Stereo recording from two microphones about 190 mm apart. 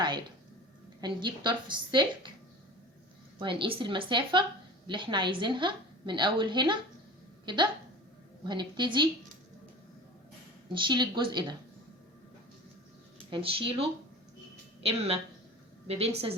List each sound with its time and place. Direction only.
1.0 s a woman's voice: 25° right (ahead or behind)
3.3 s a woman's voice: 25° right (ahead or behind)
10.8 s a woman's voice: 25° right (ahead or behind)
13.3 s a woman's voice: 30° right (ahead or behind)
14.8 s a woman's voice: 30° right (ahead or behind)